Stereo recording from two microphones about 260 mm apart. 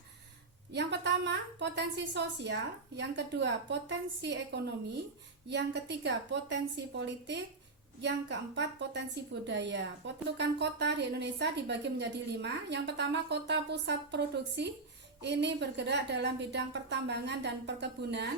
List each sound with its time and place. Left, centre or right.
0.7 s a woman's voice: right